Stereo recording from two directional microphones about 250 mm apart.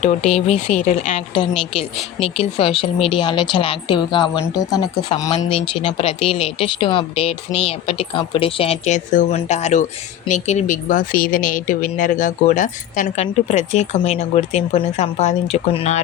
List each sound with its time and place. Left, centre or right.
0.0 s speech: left